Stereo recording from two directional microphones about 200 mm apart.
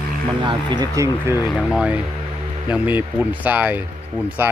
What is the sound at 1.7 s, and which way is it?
Speech, 5° right (ahead or behind).